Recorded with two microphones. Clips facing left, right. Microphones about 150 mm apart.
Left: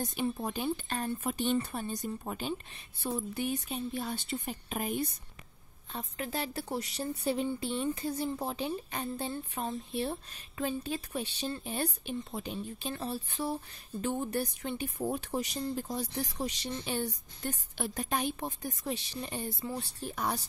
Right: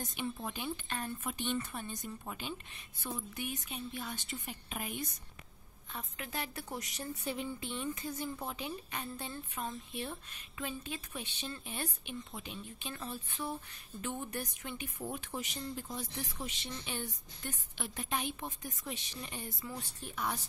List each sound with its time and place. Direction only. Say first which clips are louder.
0.0 s a woman's voice: left 6 dB; 35° left (ahead or behind)